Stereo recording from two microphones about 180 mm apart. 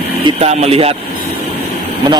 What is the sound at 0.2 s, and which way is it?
Speech, 35° right (ahead or behind).